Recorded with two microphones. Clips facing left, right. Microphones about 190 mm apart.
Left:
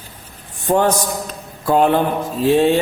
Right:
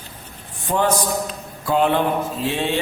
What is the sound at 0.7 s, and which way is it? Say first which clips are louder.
A man's voice: left 4 dB; 45° left (ahead or behind).